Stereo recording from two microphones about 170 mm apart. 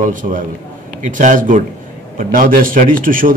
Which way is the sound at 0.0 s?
50° right (ahead or behind).